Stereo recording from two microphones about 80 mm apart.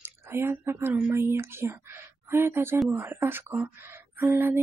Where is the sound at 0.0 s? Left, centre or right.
Right.